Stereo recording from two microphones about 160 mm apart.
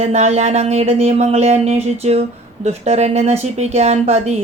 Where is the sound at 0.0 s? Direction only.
45° right (ahead or behind).